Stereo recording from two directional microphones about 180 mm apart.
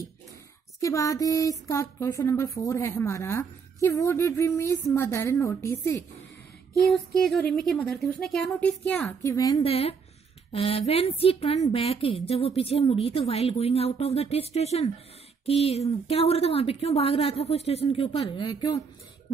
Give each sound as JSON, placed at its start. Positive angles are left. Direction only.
{"t": 0.7, "sound": "speech", "side_deg": 20}
{"t": 6.9, "sound": "a woman's voice", "side_deg": 0}
{"t": 9.2, "sound": "a woman's voice", "side_deg": 20}
{"t": 9.6, "sound": "a woman's voice", "side_deg": 30}